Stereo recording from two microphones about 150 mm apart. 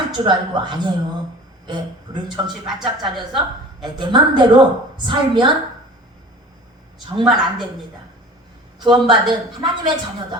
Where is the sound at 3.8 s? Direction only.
30° right (ahead or behind).